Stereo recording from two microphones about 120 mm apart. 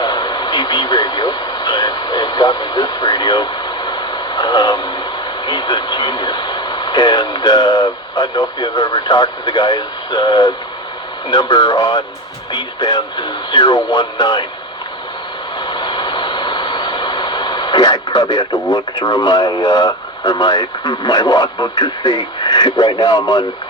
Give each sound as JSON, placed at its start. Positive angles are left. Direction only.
{"t": 0.0, "sound": "radio", "side_deg": 35}
{"t": 5.5, "sound": "speech", "side_deg": 40}
{"t": 15.5, "sound": "vehicle", "side_deg": 40}